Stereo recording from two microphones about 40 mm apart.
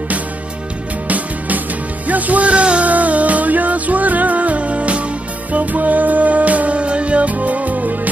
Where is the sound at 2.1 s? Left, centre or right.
Right.